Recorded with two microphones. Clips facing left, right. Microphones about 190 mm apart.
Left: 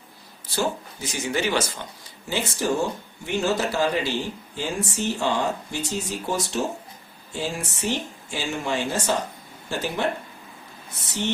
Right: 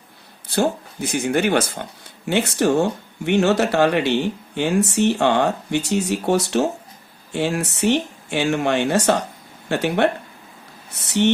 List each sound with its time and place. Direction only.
0.4 s speech: 60° right (ahead or behind)